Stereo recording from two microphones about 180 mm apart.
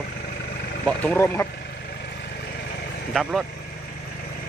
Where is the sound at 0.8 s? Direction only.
10° left (ahead or behind).